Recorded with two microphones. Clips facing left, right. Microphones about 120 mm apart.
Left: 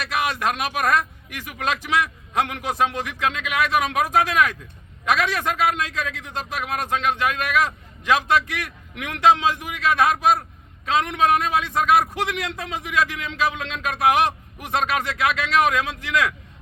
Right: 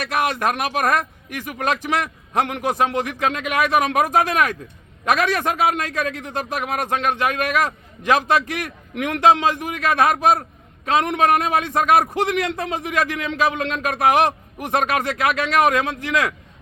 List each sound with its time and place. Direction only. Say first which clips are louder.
0.0 s a man's voice: right 3 dB; 55° right (ahead or behind)